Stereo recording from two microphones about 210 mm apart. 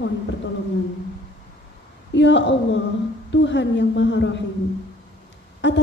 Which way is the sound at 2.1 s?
60° left (ahead or behind).